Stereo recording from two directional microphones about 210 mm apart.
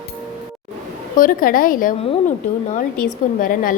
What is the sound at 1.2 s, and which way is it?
A woman's voice, 40° left (ahead or behind).